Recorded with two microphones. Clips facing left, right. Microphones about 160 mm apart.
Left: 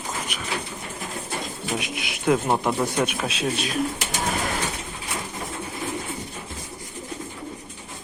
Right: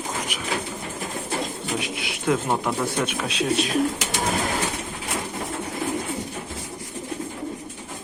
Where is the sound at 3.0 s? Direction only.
5° left (ahead or behind).